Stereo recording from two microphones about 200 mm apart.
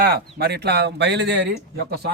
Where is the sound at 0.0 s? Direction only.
50° right (ahead or behind).